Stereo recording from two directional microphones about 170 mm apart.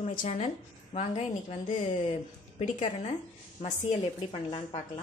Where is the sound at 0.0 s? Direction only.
50° left (ahead or behind).